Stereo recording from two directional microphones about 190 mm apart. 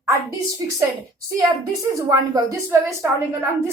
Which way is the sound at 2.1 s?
15° right (ahead or behind).